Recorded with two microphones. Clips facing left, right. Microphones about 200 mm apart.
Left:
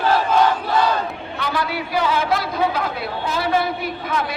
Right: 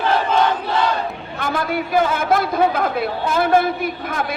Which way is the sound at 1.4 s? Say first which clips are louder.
Right 3 dB; 50° right (ahead or behind).